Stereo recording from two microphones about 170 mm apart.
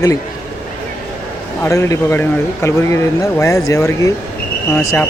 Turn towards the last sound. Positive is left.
turn(degrees=15)  # may be behind; listen again after turning